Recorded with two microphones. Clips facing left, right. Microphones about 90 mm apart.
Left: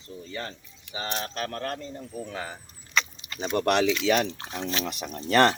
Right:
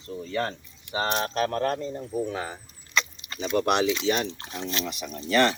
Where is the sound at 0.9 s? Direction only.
50° right (ahead or behind).